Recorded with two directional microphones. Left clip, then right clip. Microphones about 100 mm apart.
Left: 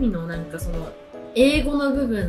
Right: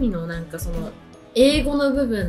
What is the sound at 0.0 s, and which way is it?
Music, 15° right (ahead or behind).